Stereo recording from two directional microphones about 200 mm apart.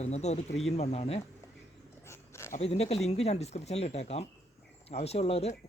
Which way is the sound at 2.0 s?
15° left (ahead or behind).